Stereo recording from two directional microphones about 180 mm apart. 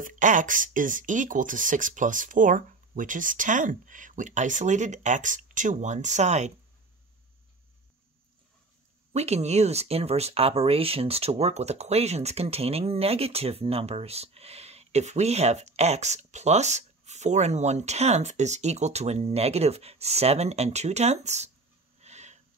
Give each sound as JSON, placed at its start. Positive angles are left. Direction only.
{"t": 0.0, "sound": "speech", "side_deg": -45}
{"t": 9.1, "sound": "speech", "side_deg": -35}
{"t": 22.0, "sound": "snort", "side_deg": -40}